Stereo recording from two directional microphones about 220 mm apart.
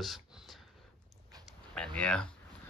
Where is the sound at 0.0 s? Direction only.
Centre (ahead or behind).